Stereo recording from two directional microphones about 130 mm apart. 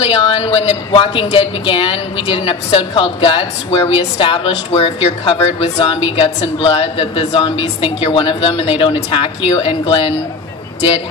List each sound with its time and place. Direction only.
0.0 s a woman's voice: 50° left (ahead or behind)